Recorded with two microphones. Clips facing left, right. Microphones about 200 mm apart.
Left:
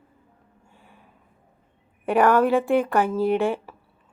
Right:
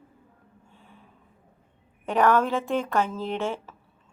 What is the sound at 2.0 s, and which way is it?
A woman's voice, 10° left (ahead or behind).